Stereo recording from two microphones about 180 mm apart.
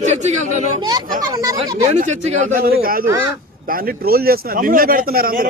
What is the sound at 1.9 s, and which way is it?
Speech, 40° right (ahead or behind).